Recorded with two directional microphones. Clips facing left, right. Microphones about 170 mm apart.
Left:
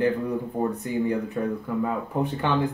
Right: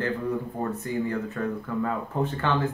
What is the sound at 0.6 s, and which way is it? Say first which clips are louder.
Speech: left 3 dB; 15° left (ahead or behind).